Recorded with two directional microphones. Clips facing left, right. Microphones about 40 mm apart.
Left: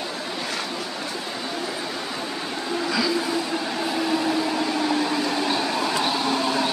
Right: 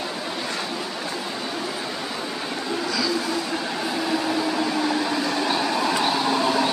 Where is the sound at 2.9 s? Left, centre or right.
Centre.